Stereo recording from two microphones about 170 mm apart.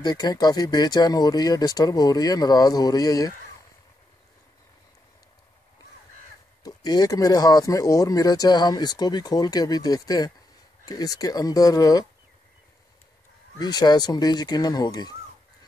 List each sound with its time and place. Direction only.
0.0 s speech: 25° left (ahead or behind)
6.6 s speech: 25° left (ahead or behind)
13.6 s speech: 25° left (ahead or behind)